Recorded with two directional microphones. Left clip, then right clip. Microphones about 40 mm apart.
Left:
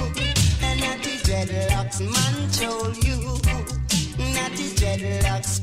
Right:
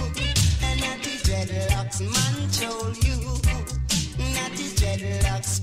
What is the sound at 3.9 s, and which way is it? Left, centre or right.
Music, left.